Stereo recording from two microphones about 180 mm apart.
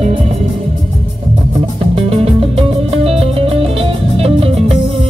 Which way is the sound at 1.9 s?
30° right (ahead or behind).